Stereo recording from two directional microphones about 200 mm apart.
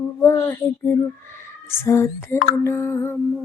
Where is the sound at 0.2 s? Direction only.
15° left (ahead or behind).